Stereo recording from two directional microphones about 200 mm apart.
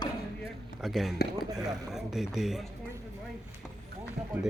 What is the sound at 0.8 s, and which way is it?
Speech, centre (ahead or behind).